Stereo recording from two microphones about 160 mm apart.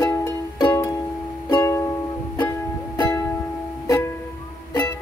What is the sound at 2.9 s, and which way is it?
Music, 25° left (ahead or behind).